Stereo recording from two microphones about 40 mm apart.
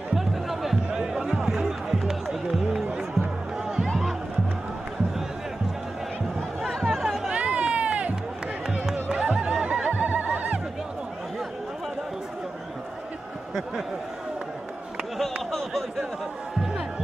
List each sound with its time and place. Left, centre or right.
0.1 s music: centre
6.9 s chatter: centre
7.2 s run: right
8.9 s music: right
15.5 s a sound: centre